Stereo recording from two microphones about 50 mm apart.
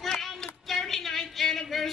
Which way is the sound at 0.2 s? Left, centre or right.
Centre.